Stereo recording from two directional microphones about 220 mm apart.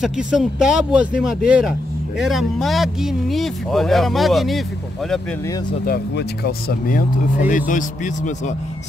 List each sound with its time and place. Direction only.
0.0 s speech: centre (ahead or behind)
5.9 s speech: 45° left (ahead or behind)